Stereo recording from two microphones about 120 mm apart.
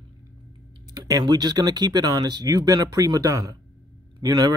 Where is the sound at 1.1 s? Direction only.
30° right (ahead or behind).